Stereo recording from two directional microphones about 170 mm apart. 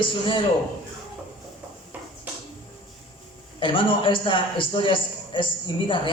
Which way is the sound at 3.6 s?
30° left (ahead or behind).